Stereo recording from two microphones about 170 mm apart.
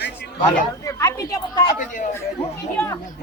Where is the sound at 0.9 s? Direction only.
20° left (ahead or behind).